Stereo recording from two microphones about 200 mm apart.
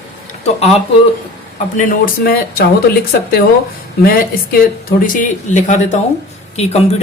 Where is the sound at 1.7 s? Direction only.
45° left (ahead or behind).